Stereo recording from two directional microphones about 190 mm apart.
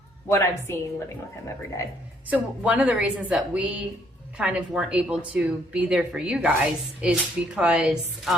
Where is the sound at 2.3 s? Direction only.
10° right (ahead or behind).